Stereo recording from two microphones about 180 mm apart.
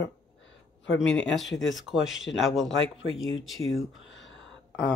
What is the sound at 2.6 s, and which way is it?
Speech, 90° left.